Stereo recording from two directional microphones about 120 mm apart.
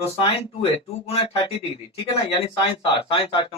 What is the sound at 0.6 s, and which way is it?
Speech, 55° left (ahead or behind).